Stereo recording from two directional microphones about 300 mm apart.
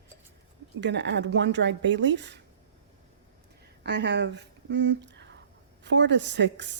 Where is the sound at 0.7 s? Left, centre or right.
Right.